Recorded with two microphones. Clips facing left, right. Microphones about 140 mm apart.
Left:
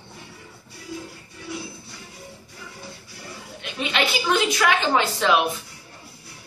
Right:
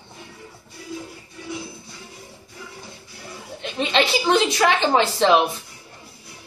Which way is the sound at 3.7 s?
30° right (ahead or behind).